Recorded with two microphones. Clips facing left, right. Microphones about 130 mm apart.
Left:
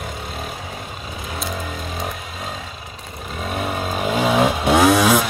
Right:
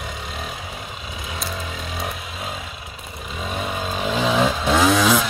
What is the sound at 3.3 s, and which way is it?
Vehicle, centre (ahead or behind).